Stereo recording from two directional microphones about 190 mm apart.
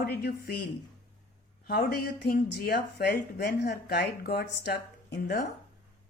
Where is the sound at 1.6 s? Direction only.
55° left (ahead or behind).